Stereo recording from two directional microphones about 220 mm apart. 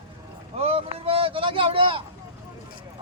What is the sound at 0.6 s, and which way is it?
Speech, 25° right (ahead or behind).